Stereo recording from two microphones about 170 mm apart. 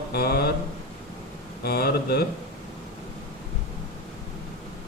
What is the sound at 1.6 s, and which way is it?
Mantra, 65° left (ahead or behind).